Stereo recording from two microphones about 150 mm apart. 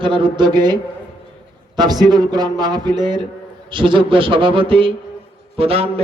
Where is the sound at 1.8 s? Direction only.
25° right (ahead or behind).